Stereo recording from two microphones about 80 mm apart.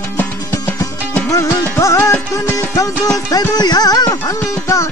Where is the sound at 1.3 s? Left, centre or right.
Left.